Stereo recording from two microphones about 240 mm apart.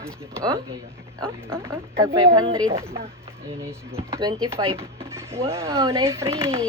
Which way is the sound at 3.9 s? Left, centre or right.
Right.